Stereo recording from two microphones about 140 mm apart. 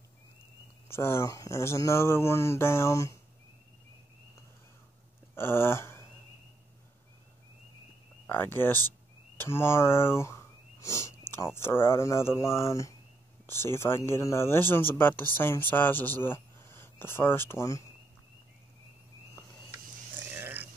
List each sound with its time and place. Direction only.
0.8 s speech: 20° left (ahead or behind)
5.3 s speech: 15° left (ahead or behind)
8.3 s speech: 15° left (ahead or behind)
20.2 s a sound: 15° right (ahead or behind)